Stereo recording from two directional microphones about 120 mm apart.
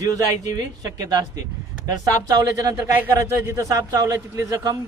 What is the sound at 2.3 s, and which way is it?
Speech, 30° right (ahead or behind).